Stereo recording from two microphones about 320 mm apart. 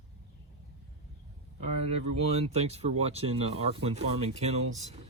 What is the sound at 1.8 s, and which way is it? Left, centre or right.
Speech, centre.